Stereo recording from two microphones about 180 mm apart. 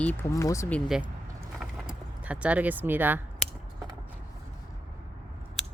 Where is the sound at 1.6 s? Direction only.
5° right (ahead or behind).